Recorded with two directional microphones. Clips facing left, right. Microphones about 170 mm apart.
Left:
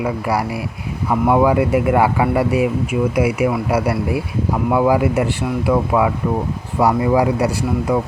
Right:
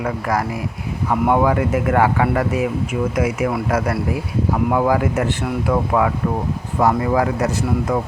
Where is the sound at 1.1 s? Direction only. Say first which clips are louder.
Left 2 dB; centre (ahead or behind).